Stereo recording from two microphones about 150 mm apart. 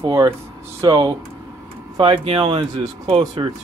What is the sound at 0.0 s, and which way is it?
Speech, 25° right (ahead or behind).